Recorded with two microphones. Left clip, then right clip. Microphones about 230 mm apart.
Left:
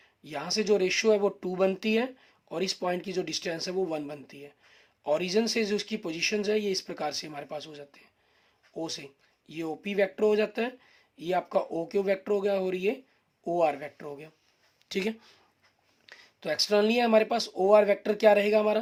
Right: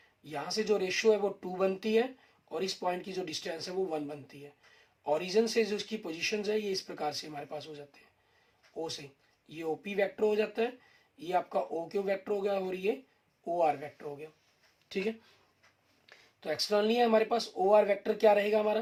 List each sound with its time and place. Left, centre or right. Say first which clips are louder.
0.3 s speech: left 4 dB; left